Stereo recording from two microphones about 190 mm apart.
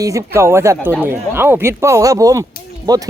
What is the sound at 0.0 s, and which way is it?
Speech, 15° right (ahead or behind).